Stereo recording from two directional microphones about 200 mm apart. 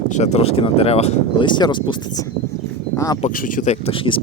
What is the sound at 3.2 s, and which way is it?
Speech, 45° left (ahead or behind).